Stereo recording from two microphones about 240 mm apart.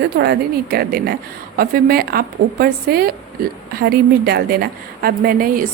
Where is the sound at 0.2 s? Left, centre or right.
Right.